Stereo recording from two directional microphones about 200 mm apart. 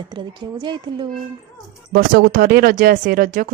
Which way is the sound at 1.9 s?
50° right (ahead or behind).